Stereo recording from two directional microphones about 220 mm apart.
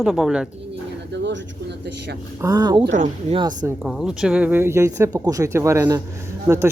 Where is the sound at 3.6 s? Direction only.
Centre (ahead or behind).